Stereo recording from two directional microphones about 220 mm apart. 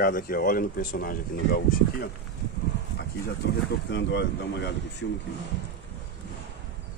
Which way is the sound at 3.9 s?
50° left (ahead or behind).